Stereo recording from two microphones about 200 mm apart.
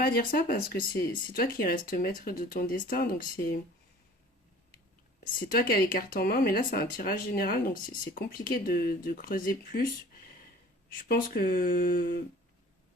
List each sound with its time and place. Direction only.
0.0 s speech: 45° left (ahead or behind)
5.2 s speech: 45° left (ahead or behind)
11.1 s speech: 45° left (ahead or behind)